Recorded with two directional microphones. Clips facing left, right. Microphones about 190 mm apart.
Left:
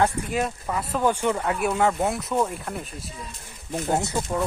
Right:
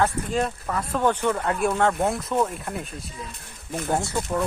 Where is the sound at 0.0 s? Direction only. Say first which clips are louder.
Even; 10° left (ahead or behind).